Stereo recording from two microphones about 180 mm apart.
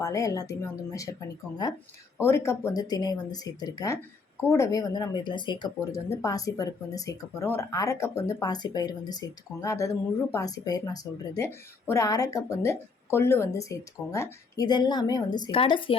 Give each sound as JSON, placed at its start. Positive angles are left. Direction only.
{"t": 0.0, "sound": "speech", "side_deg": 20}
{"t": 2.2, "sound": "speech", "side_deg": 15}